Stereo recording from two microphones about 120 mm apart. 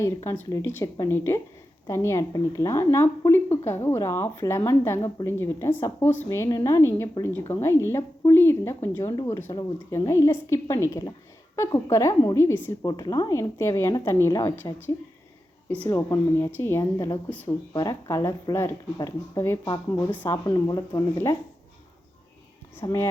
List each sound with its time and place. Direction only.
0.3 s a woman's voice: 20° left (ahead or behind)
10.1 s a woman's voice: 25° left (ahead or behind)
12.8 s a woman's voice: 35° left (ahead or behind)
15.9 s a woman's voice: 25° left (ahead or behind)
17.7 s a woman's voice: 30° left (ahead or behind)
20.1 s speech: 15° left (ahead or behind)
20.3 s speech: 35° left (ahead or behind)
22.8 s speech: 40° left (ahead or behind)